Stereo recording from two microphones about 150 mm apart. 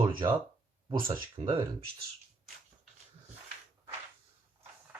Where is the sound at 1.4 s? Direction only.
35° right (ahead or behind).